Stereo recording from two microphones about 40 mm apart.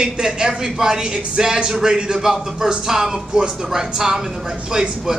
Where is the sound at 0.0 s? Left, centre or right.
Centre.